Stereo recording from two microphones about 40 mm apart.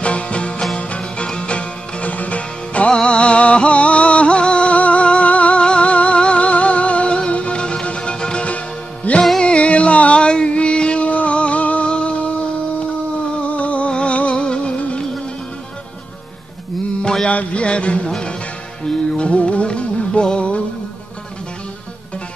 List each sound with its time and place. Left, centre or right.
0.0 s music: left
2.9 s music: left
13.4 s music: left
17.0 s mantra: left
17.3 s music: left